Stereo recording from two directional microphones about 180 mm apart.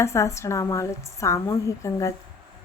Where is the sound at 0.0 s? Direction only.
15° left (ahead or behind).